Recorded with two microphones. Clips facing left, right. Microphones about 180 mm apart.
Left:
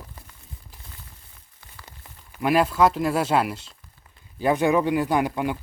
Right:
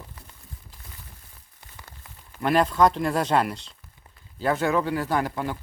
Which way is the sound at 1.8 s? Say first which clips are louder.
Left 1 dB; 15° left (ahead or behind).